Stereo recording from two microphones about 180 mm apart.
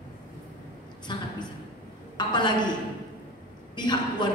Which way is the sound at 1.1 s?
25° left (ahead or behind).